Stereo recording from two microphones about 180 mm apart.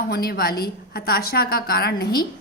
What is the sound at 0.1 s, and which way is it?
A woman's voice, 60° left (ahead or behind).